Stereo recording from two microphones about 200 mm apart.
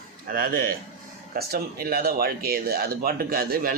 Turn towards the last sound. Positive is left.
turn(degrees=-45)  # may be behind; listen again after turning